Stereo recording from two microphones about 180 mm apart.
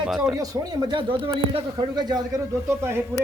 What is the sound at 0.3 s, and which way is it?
Speech, 20° right (ahead or behind).